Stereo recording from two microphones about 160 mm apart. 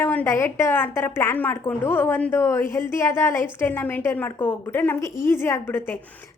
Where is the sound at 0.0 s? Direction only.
10° left (ahead or behind).